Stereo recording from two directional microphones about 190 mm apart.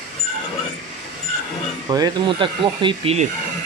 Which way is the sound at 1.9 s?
20° right (ahead or behind).